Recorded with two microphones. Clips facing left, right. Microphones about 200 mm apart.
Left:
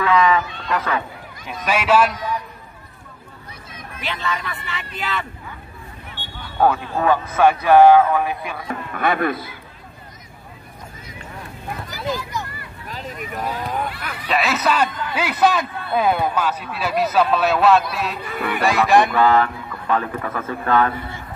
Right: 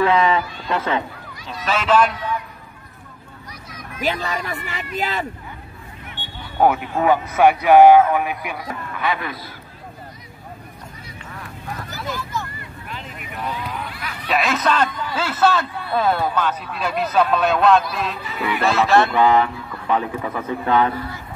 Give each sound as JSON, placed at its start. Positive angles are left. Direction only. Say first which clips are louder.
{"t": 0.0, "sound": "speech", "louder": "even", "side_deg": -30}
{"t": 1.6, "sound": "speech", "louder": "even", "side_deg": 10}
{"t": 4.0, "sound": "speech", "louder": "right 3 dB", "side_deg": -40}
{"t": 6.1, "sound": "speech", "louder": "right 1 dB", "side_deg": -20}
{"t": 8.9, "sound": "speech", "louder": "left 5 dB", "side_deg": 50}
{"t": 12.1, "sound": "vehicle", "louder": "left 3 dB", "side_deg": 15}
{"t": 12.8, "sound": "a sound", "louder": "left 5 dB", "side_deg": 40}
{"t": 14.2, "sound": "a man's voice", "louder": "even", "side_deg": 0}
{"t": 18.2, "sound": "speech", "louder": "even", "side_deg": 55}
{"t": 18.6, "sound": "speech", "louder": "left 1 dB", "side_deg": 15}
{"t": 19.1, "sound": "speech", "louder": "even", "side_deg": -15}
{"t": 20.9, "sound": "speech", "louder": "right 2 dB", "side_deg": 25}